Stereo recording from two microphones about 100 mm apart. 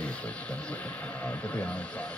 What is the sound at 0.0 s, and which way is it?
Radio, 10° left (ahead or behind).